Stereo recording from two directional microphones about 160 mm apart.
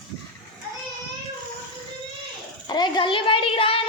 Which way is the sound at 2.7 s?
30° left (ahead or behind).